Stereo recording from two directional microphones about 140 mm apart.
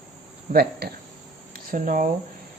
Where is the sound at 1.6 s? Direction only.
70° right (ahead or behind).